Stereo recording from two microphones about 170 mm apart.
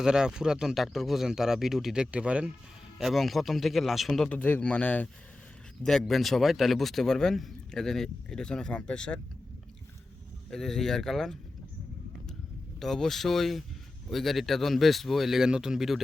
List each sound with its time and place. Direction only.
0.0 s speech: 5° right (ahead or behind)
10.5 s speech: centre (ahead or behind)
12.8 s speech: centre (ahead or behind)